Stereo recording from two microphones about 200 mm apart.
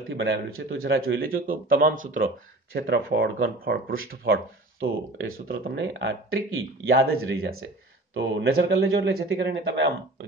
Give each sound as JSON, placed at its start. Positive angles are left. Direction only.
{"t": 0.1, "sound": "a man's voice", "side_deg": -70}
{"t": 0.8, "sound": "a man's voice", "side_deg": -50}